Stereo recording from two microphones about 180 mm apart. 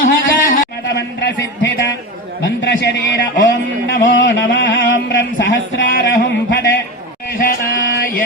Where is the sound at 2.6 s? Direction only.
80° left.